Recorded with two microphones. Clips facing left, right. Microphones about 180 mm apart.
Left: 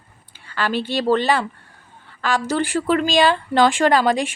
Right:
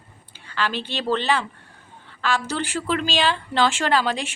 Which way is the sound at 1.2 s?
45° left (ahead or behind).